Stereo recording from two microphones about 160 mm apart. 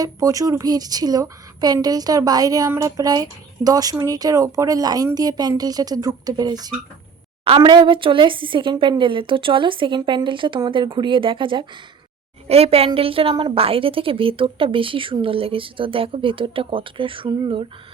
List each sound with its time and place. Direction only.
0.0 s a woman's voice: 20° right (ahead or behind)